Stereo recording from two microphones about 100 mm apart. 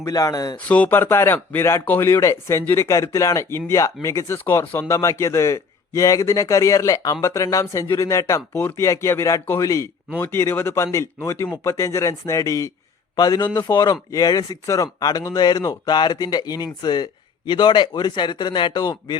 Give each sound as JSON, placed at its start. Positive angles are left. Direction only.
{"t": 0.0, "sound": "speech", "side_deg": 35}
{"t": 0.7, "sound": "a man's voice", "side_deg": 15}